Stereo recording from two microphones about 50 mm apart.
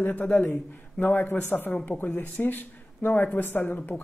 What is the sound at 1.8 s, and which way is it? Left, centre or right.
Speech, left.